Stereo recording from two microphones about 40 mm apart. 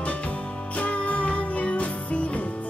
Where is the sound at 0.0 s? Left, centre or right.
Left.